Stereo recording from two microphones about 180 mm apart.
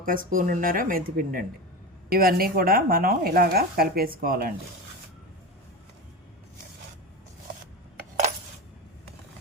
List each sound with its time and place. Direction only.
0.0 s speech: 50° right (ahead or behind)